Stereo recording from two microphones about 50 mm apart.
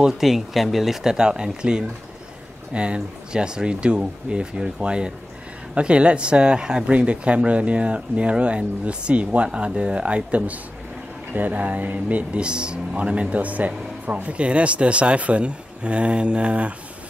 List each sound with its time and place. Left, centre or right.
0.2 s speech: centre
1.1 s speech: centre; by 12.3 s right
12.4 s speech: centre